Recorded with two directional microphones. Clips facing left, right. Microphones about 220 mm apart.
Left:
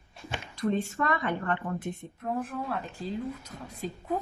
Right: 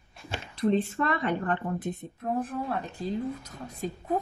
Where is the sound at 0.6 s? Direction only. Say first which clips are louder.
Right 3 dB; 25° right (ahead or behind).